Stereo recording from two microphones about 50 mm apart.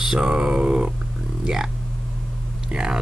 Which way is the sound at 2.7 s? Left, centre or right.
Centre.